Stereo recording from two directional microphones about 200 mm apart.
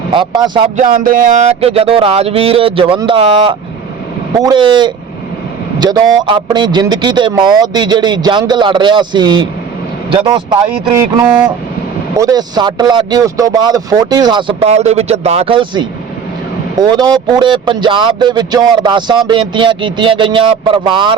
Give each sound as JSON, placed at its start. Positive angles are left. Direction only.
{"t": 0.1, "sound": "speech", "side_deg": -25}
{"t": 0.8, "sound": "speech", "side_deg": -40}
{"t": 12.1, "sound": "speech", "side_deg": -20}